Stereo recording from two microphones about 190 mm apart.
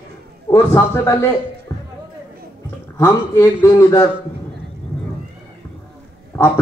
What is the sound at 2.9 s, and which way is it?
A man's voice, 15° left (ahead or behind).